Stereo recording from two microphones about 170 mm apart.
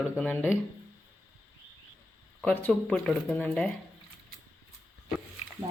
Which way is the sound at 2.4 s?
10° left (ahead or behind).